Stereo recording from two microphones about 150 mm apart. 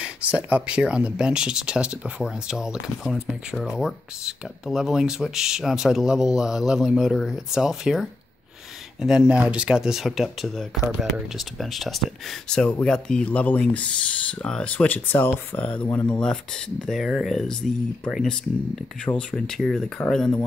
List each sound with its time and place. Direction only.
0.0 s speech: 10° right (ahead or behind)